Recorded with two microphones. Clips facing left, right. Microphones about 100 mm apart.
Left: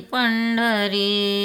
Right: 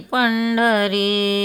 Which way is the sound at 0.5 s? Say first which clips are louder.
Right 4 dB; 40° right (ahead or behind).